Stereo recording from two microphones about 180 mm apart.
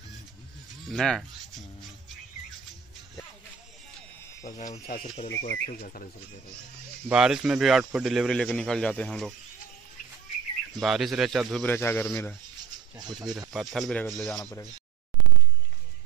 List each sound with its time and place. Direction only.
0.8 s a man's voice: centre (ahead or behind)
4.5 s speech: 45° left (ahead or behind)
5.3 s speech: 65° left (ahead or behind)
7.1 s a man's voice: 5° right (ahead or behind)
10.8 s a man's voice: centre (ahead or behind)
11.6 s a man's voice: 10° left (ahead or behind)
13.3 s a man's voice: centre (ahead or behind)